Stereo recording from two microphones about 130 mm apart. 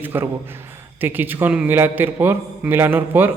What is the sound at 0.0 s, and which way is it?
A man's voice, 15° right (ahead or behind).